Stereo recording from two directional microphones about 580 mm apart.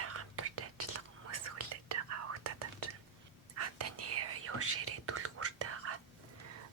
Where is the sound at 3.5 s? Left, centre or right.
Right.